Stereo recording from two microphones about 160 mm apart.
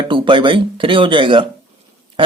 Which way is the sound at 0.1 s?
30° right (ahead or behind).